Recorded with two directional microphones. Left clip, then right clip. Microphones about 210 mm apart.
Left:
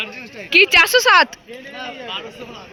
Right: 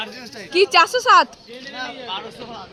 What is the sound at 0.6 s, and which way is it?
Speech, 10° left (ahead or behind).